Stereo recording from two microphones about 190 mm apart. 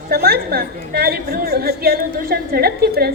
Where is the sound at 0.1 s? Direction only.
55° right (ahead or behind).